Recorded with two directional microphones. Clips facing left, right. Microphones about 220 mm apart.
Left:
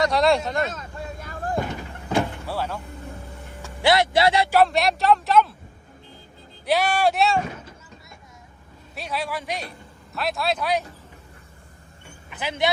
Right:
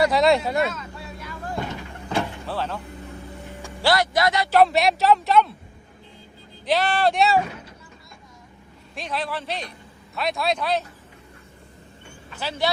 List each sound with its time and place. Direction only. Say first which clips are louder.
0.0 s speech: right 1 dB; centre (ahead or behind)
0.7 s vehicle: left 1 dB; 50° left (ahead or behind)
2.0 s door: left 2 dB; 10° left (ahead or behind)
3.8 s a man's voice: left 2 dB; 20° left (ahead or behind)
4.5 s speech: right 1 dB; centre (ahead or behind)
6.7 s a man's voice: even; 10° left (ahead or behind)
9.0 s a man's voice: even; 10° left (ahead or behind)
12.3 s a man's voice: left 1 dB; 15° left (ahead or behind)